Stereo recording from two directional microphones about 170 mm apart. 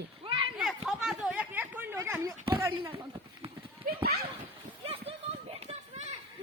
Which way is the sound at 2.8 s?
30° right (ahead or behind).